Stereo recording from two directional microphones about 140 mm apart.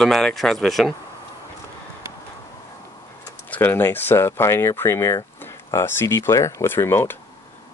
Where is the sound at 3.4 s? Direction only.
15° left (ahead or behind).